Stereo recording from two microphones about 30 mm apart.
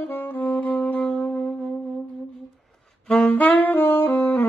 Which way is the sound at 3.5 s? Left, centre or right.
Left.